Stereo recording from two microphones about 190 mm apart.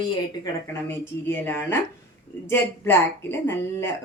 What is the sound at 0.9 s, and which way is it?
Speech, 10° left (ahead or behind).